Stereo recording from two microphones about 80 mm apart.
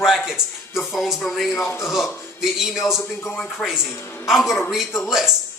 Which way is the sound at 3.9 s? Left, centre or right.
Left.